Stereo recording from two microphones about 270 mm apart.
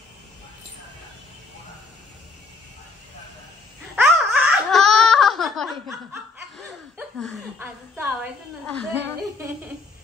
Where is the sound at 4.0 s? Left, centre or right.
Centre.